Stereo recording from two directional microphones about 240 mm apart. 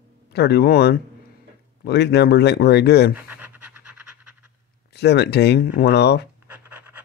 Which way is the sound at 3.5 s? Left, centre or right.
Right.